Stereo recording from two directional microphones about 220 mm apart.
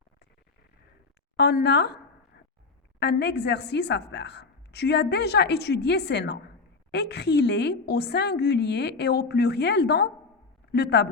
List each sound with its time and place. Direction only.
1.4 s a woman's voice: 45° left (ahead or behind)
3.0 s a woman's voice: 50° left (ahead or behind)